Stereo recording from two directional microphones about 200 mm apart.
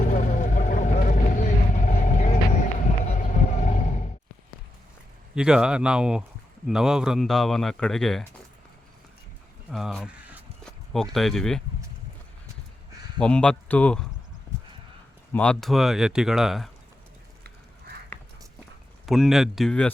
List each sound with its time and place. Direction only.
0.0 s vehicle: 40° left (ahead or behind)
5.3 s speech: 5° right (ahead or behind)
9.7 s speech: centre (ahead or behind)
13.1 s speech: 5° left (ahead or behind)
15.3 s speech: 5° left (ahead or behind)
19.0 s speech: centre (ahead or behind)